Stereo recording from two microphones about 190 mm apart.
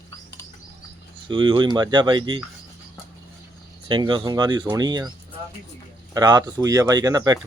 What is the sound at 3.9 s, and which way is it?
Speech, 25° right (ahead or behind).